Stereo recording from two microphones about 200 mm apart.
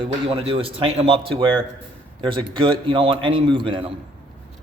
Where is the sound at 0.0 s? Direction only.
25° right (ahead or behind).